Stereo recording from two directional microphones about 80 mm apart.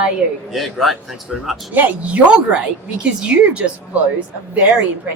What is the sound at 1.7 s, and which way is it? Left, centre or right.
Speech, centre.